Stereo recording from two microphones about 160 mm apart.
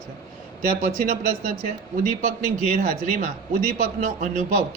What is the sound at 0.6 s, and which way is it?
Speech, 60° right (ahead or behind).